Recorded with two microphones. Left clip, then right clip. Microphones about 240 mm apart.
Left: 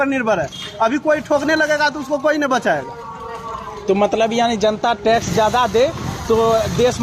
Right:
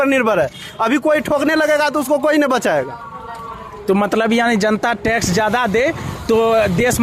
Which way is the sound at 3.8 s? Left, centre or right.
Right.